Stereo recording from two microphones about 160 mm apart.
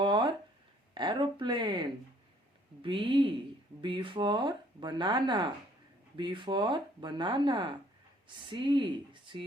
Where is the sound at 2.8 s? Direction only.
30° right (ahead or behind).